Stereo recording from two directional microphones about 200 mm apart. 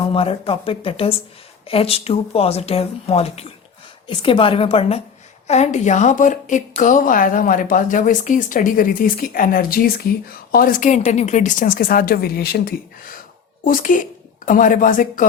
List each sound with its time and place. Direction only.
0.0 s a woman's voice: 30° left (ahead or behind)